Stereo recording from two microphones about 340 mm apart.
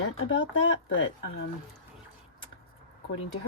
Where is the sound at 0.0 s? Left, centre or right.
Left.